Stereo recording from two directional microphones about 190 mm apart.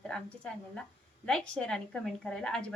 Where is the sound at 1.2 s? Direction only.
5° left (ahead or behind).